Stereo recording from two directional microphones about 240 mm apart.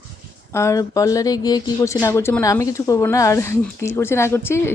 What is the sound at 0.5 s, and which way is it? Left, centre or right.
Speech, centre.